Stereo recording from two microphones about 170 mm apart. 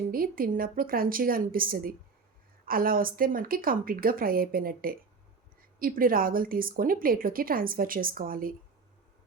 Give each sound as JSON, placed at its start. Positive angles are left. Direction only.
{"t": 0.1, "sound": "a woman's voice", "side_deg": -60}